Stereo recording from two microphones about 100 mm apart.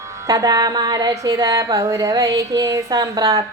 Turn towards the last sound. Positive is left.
turn(degrees=-40)  # may be behind; listen again after turning